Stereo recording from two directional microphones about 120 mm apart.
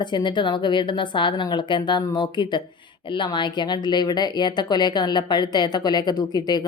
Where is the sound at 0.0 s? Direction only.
40° left (ahead or behind).